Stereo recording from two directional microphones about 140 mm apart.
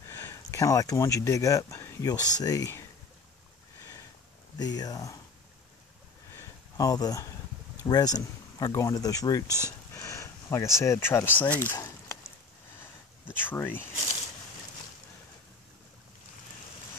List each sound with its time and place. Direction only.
0.1 s speech: 20° left (ahead or behind)
4.6 s speech: 30° left (ahead or behind)
6.3 s a sound: 25° left (ahead or behind)
7.8 s speech: 25° left (ahead or behind)
9.9 s a sound: 20° left (ahead or behind)
10.8 s speech: 20° left (ahead or behind)
13.3 s speech: 15° left (ahead or behind)